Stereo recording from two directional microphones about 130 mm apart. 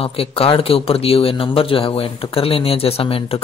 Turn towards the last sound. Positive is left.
turn(degrees=45)  # may be behind; listen again after turning